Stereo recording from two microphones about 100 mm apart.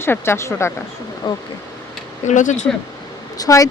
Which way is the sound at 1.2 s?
50° left (ahead or behind).